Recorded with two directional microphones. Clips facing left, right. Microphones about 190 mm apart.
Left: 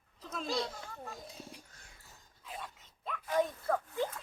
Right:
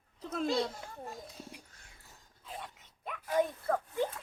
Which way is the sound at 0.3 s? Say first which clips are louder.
Right 6 dB; 60° right (ahead or behind).